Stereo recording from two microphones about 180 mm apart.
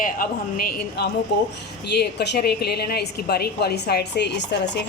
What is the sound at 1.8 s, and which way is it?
A woman's voice, 65° left (ahead or behind).